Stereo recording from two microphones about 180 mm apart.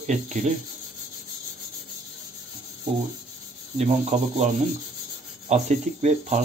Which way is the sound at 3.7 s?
40° right (ahead or behind).